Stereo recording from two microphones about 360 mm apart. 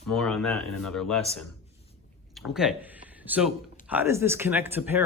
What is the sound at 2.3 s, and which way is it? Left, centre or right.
Speech, centre.